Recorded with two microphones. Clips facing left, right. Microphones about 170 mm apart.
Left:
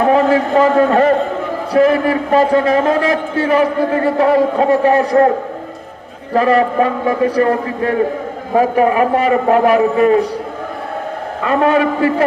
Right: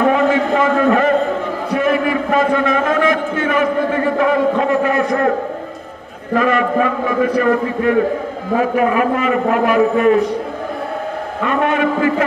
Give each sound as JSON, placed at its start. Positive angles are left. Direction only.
{"t": 0.1, "sound": "a man's voice", "side_deg": 35}
{"t": 6.3, "sound": "a man's voice", "side_deg": 35}
{"t": 11.4, "sound": "a man's voice", "side_deg": 35}